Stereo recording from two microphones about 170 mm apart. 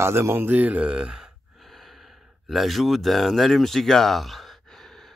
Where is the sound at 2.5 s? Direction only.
Centre (ahead or behind).